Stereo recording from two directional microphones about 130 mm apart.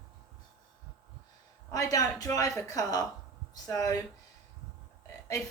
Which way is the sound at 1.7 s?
25° left (ahead or behind).